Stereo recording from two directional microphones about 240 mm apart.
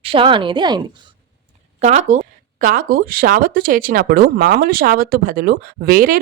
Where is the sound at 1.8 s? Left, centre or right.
Right.